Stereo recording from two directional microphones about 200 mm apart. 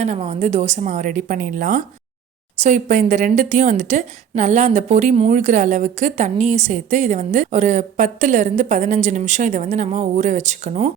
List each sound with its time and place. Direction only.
0.0 s a woman's voice: 35° right (ahead or behind)